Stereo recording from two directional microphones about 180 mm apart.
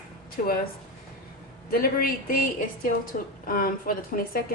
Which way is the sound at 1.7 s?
55° left (ahead or behind).